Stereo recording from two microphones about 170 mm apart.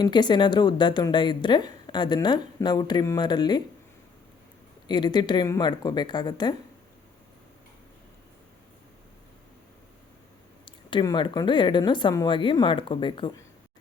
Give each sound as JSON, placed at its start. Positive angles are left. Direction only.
{"t": 0.0, "sound": "a woman's voice", "side_deg": 25}
{"t": 4.9, "sound": "a woman's voice", "side_deg": 25}
{"t": 10.7, "sound": "a woman's voice", "side_deg": 30}